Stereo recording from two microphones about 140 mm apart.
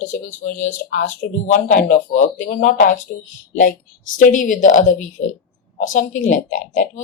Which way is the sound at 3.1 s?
90° left.